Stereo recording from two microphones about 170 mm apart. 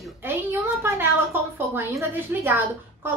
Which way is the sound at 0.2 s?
15° right (ahead or behind).